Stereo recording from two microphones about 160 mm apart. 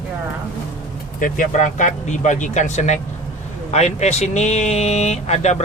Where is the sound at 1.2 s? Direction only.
55° left (ahead or behind).